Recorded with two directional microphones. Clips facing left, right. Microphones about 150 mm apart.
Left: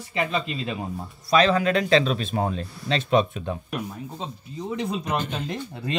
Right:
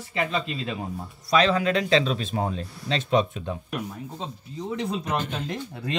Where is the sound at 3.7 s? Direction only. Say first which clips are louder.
Left 1 dB; 15° left (ahead or behind).